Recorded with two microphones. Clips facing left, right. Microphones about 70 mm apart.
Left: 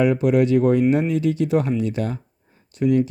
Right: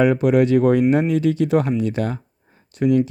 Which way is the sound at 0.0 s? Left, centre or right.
Right.